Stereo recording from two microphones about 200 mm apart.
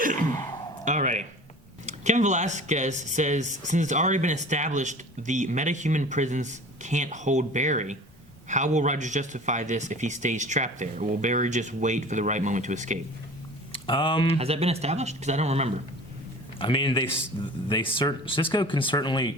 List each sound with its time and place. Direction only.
0.0 s sigh: 40° right (ahead or behind)
0.9 s speech: 35° right (ahead or behind)
13.8 s speech: 25° left (ahead or behind)
14.3 s speech: 30° right (ahead or behind)
16.6 s speech: 25° left (ahead or behind)